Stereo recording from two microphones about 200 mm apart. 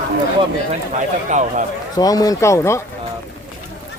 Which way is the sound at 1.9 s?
20° left (ahead or behind).